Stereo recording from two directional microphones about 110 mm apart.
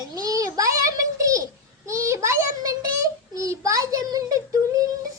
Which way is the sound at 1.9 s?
25° right (ahead or behind).